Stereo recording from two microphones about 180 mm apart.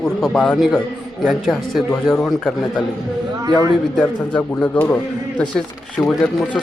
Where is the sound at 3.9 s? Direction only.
10° left (ahead or behind).